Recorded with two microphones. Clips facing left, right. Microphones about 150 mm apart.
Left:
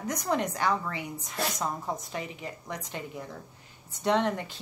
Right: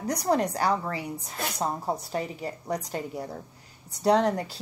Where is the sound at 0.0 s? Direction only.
35° right (ahead or behind).